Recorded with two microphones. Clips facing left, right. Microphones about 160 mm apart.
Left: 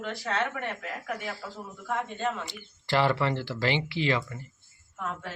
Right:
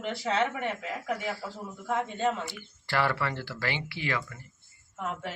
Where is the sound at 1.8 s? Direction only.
20° right (ahead or behind).